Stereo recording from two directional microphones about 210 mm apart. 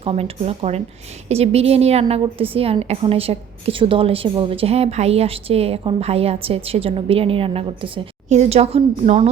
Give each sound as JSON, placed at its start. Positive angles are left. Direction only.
{"t": 0.0, "sound": "a woman's voice", "side_deg": -25}